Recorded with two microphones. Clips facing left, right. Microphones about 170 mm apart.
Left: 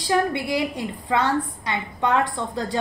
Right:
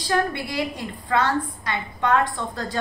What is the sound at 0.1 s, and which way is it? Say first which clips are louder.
A woman's voice: left 2 dB; 15° left (ahead or behind).